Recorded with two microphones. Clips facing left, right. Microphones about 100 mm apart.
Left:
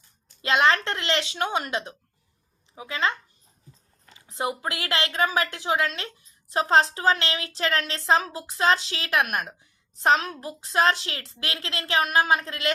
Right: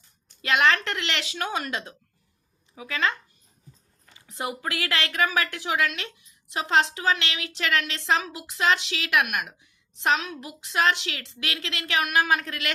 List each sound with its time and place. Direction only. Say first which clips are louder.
0.4 s speech: left 1 dB; 30° left (ahead or behind)
4.3 s a woman's voice: left 2 dB; 25° left (ahead or behind)